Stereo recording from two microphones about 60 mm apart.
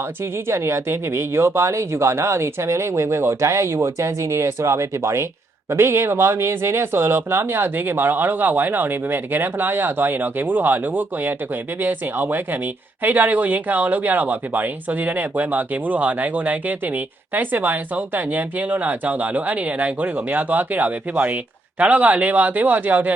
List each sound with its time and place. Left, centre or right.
0.4 s speech: right